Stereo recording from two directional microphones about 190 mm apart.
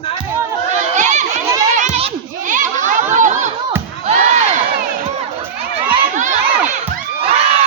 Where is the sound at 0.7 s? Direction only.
40° right (ahead or behind).